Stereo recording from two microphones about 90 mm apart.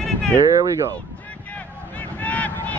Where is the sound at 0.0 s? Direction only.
10° left (ahead or behind).